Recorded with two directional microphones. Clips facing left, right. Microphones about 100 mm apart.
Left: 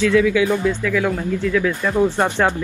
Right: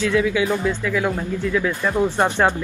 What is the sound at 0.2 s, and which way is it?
Speech, 20° right (ahead or behind).